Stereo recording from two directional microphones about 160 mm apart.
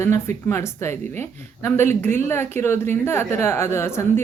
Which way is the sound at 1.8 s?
45° right (ahead or behind).